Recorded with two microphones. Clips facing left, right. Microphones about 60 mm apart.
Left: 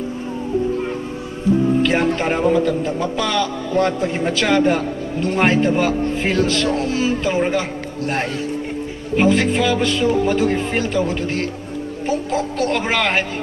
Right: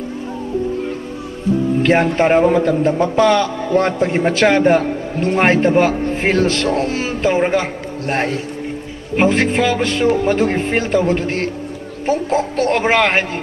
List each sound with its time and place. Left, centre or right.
1.8 s a man's voice: right